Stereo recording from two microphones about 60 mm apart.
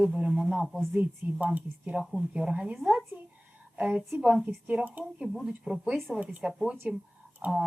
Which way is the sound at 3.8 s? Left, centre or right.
Centre.